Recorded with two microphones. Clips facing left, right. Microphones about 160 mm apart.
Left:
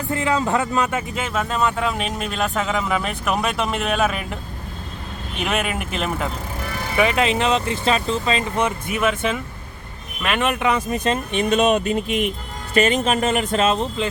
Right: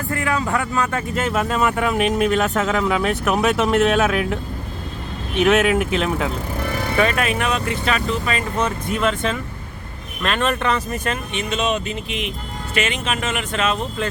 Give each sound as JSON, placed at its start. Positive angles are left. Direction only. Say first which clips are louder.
{"t": 0.1, "sound": "speech", "louder": "left 2 dB", "side_deg": 20}
{"t": 1.1, "sound": "speech", "louder": "right 3 dB", "side_deg": -5}
{"t": 5.4, "sound": "speech", "louder": "right 8 dB", "side_deg": 0}
{"t": 6.9, "sound": "speech", "louder": "left 2 dB", "side_deg": 15}
{"t": 8.6, "sound": "speech", "louder": "right 2 dB", "side_deg": 10}
{"t": 11.3, "sound": "speech", "louder": "left 6 dB", "side_deg": 40}
{"t": 14.0, "sound": "speech", "louder": "even", "side_deg": 20}